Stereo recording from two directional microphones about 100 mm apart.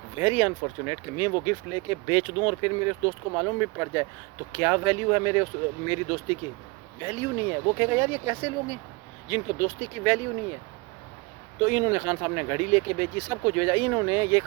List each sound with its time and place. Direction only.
0.2 s speech: 20° right (ahead or behind)
11.6 s speech: 30° right (ahead or behind)